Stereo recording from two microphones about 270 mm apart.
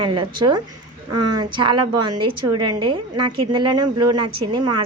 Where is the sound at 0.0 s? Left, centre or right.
Centre.